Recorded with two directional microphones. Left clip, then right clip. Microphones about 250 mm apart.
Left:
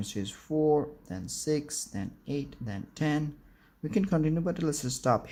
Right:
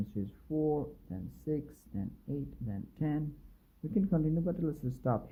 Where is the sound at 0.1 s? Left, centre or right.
Left.